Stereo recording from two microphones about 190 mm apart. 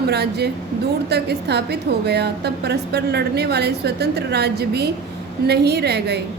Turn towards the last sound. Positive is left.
turn(degrees=-60)  # may be behind; listen again after turning